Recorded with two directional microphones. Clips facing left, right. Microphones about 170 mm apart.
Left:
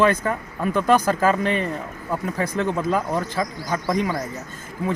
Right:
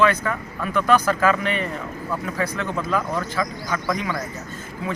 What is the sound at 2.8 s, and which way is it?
Speech, 20° left (ahead or behind).